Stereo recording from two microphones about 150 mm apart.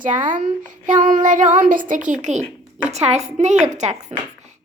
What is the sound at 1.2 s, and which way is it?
Child singing, 55° right (ahead or behind).